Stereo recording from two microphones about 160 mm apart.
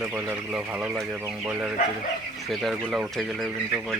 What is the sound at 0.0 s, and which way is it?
Speech, 10° right (ahead or behind).